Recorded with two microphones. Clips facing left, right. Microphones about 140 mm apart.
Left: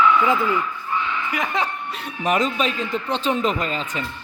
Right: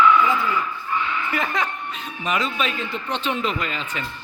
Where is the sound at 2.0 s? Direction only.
50° left (ahead or behind); by 4.0 s 35° left (ahead or behind).